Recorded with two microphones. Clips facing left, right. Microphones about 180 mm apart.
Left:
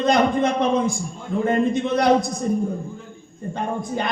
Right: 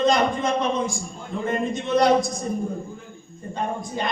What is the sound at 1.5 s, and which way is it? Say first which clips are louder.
Speech: left 2 dB; 55° left (ahead or behind).